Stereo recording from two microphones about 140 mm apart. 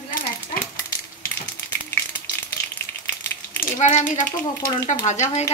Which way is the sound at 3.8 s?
65° left (ahead or behind).